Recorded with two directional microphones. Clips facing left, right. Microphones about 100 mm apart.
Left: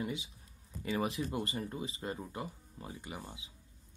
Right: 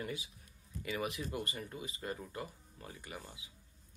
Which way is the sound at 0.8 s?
30° left (ahead or behind).